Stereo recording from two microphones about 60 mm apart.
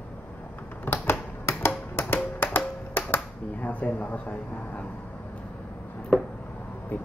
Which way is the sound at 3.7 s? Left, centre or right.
Left.